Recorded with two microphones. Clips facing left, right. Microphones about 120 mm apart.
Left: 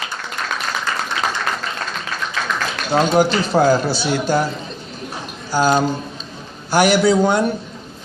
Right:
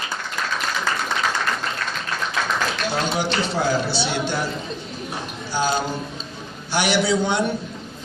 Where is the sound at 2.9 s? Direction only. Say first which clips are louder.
Left 12 dB; 45° left (ahead or behind).